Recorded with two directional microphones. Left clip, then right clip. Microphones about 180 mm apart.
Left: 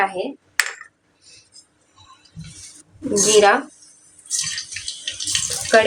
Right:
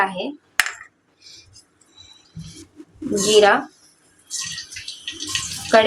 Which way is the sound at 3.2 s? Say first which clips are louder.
Even; 10° left (ahead or behind).